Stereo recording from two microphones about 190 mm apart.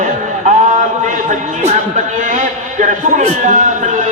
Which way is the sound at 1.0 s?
40° right (ahead or behind).